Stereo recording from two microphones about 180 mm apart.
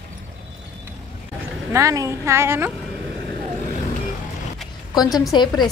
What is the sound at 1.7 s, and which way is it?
Speech, 15° right (ahead or behind).